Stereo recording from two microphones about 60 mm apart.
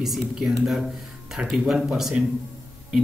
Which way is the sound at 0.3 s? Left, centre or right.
Centre.